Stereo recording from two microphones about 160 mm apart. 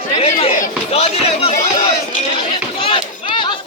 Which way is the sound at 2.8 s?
35° left (ahead or behind).